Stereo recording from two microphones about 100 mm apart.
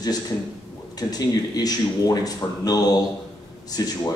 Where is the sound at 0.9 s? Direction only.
40° left (ahead or behind).